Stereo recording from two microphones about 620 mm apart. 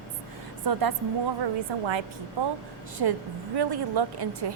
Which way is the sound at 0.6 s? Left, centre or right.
Right.